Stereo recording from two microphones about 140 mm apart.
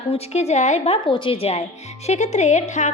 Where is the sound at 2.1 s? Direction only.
55° left (ahead or behind).